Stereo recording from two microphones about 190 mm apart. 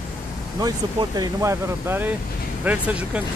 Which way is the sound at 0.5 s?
20° right (ahead or behind).